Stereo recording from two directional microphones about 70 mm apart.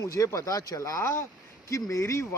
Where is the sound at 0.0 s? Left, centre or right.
Left.